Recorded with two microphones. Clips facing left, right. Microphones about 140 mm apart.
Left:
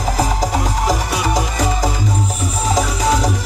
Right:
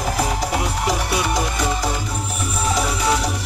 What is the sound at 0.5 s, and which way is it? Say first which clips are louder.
Music: left 3 dB; 40° left (ahead or behind).